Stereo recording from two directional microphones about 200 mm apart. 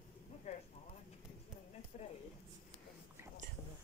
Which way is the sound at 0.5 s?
35° left (ahead or behind).